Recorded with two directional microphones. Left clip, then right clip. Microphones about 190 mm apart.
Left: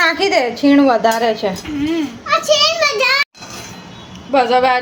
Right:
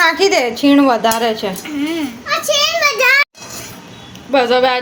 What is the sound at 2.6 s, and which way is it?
Speech, 45° right (ahead or behind).